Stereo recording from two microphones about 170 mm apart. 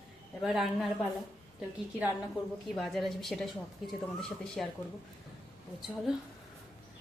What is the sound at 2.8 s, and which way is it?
Speech, centre (ahead or behind).